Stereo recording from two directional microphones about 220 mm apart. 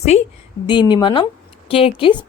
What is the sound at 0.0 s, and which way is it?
Speech, 30° left (ahead or behind).